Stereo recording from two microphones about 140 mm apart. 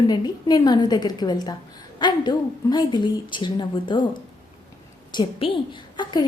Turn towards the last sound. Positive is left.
turn(degrees=35)  # may be behind; listen again after turning